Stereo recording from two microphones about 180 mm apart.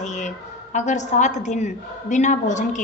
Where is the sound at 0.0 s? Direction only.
40° left (ahead or behind).